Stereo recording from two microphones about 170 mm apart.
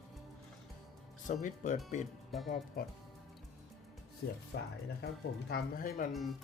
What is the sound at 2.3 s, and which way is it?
Speech, centre (ahead or behind).